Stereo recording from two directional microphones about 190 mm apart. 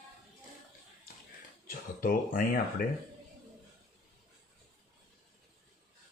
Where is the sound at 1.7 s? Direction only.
45° left (ahead or behind).